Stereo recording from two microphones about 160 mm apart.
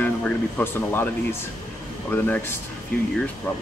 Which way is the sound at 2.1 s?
10° left (ahead or behind).